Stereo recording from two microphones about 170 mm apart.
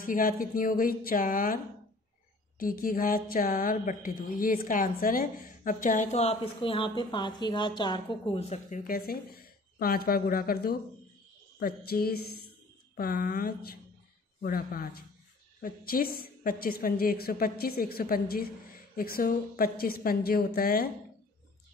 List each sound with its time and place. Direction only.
0.0 s speech: 55° left (ahead or behind)
2.6 s speech: 55° left (ahead or behind)